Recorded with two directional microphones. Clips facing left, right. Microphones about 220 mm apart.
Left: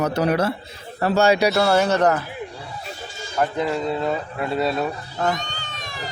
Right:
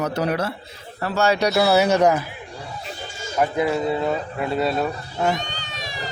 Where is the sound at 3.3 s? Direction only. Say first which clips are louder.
Right 2 dB; 10° right (ahead or behind).